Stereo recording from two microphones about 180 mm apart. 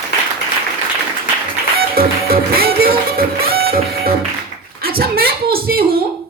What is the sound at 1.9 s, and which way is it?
Music, 55° right (ahead or behind).